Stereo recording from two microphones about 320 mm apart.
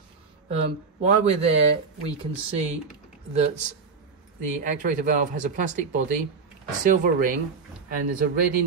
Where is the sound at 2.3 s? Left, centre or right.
Right.